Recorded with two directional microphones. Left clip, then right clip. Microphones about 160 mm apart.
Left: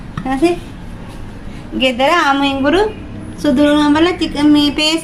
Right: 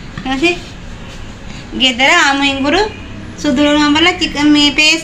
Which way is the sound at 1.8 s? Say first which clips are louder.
Right 3 dB; 25° left (ahead or behind).